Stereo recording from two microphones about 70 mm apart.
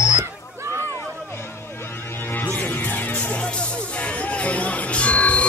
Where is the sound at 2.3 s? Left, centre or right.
Left.